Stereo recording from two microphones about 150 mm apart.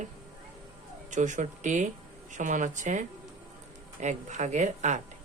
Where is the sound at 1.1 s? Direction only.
55° right (ahead or behind).